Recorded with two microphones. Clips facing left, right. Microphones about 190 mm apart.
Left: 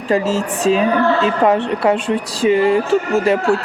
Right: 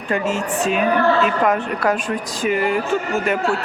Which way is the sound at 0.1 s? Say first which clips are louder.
Left 4 dB; 30° left (ahead or behind).